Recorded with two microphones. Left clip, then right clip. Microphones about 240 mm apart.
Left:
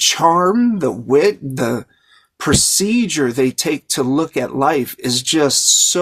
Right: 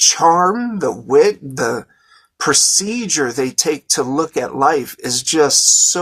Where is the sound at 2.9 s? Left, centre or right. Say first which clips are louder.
Left 1 dB; left.